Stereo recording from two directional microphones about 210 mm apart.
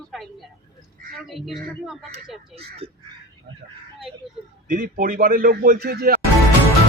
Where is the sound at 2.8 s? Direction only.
30° right (ahead or behind).